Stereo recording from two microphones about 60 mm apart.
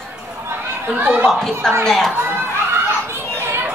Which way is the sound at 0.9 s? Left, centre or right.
Right.